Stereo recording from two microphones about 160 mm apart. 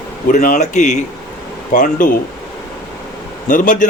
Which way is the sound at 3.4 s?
55° left (ahead or behind).